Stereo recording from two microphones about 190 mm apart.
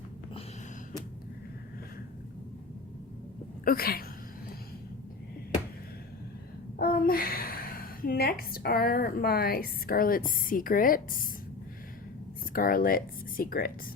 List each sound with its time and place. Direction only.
3.6 s speech: 50° left (ahead or behind)
6.7 s a woman's voice: 50° left (ahead or behind)
12.5 s speech: 50° left (ahead or behind)